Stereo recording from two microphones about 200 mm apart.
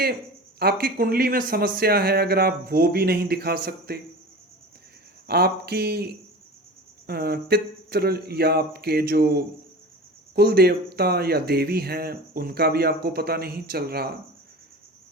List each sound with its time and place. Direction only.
0.6 s speech: 50° right (ahead or behind)
5.3 s speech: 50° right (ahead or behind)